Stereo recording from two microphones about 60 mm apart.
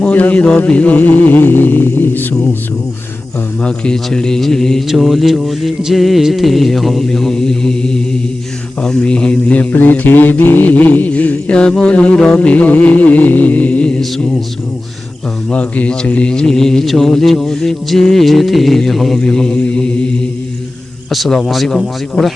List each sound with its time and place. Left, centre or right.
0.1 s mantra: left
3.6 s speech: centre
4.9 s music: centre
8.8 s speech: centre
9.7 s mantra: left
15.4 s speech: left
19.5 s mantra: centre
21.1 s music: centre